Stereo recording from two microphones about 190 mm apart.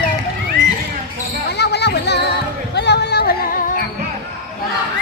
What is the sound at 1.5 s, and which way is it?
Basketball bounce, 60° left (ahead or behind).